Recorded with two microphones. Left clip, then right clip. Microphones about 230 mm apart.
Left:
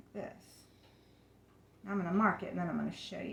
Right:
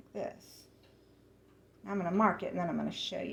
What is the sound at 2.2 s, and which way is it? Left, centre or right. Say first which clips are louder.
Speech: right 3 dB; left.